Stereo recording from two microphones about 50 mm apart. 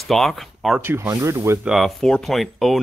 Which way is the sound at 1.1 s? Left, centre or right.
Right.